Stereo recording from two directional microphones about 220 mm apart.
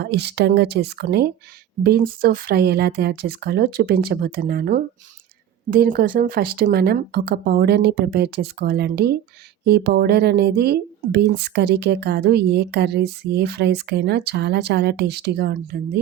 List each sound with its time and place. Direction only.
0.0 s speech: 50° right (ahead or behind)